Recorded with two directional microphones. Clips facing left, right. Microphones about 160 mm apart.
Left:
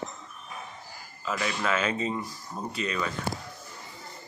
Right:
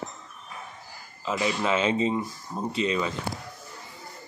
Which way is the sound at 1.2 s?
20° right (ahead or behind).